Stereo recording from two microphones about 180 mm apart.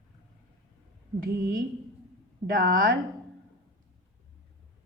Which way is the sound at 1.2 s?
50° right (ahead or behind).